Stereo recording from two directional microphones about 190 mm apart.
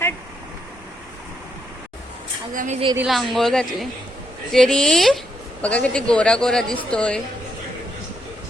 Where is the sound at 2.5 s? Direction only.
40° right (ahead or behind).